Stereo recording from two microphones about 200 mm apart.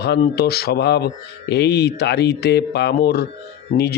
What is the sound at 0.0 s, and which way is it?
Speech, 55° left (ahead or behind).